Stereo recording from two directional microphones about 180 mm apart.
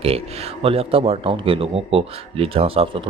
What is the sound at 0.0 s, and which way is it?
A man's voice, 30° right (ahead or behind).